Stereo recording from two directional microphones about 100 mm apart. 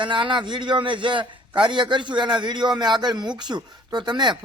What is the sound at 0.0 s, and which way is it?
A man's voice, 55° right (ahead or behind).